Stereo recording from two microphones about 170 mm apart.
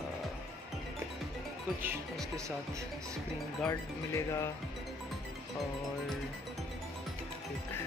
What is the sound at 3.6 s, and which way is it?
Speech, 15° left (ahead or behind).